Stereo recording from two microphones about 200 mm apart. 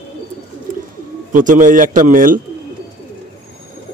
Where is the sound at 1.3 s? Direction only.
40° right (ahead or behind).